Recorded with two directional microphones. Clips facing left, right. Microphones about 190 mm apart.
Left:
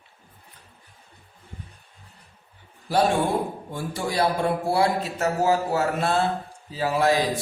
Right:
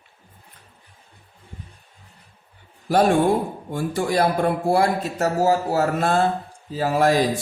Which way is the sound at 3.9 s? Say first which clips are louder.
Right 3 dB; 50° right (ahead or behind).